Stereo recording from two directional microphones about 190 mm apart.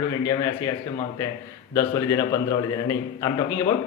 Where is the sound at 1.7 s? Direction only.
15° left (ahead or behind).